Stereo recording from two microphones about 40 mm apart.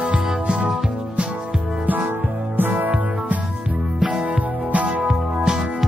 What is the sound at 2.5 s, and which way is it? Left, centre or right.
Music, right.